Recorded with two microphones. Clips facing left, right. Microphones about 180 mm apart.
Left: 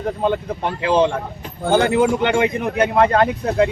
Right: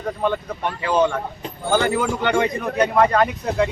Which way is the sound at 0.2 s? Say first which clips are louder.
Left 1 dB; 30° left (ahead or behind).